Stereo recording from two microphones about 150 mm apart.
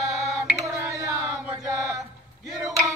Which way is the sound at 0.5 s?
20° right (ahead or behind).